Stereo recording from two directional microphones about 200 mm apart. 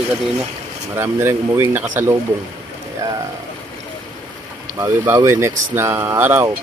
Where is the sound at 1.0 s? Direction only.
10° right (ahead or behind).